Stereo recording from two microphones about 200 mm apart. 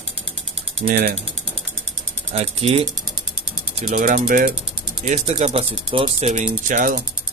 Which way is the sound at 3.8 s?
45° right (ahead or behind).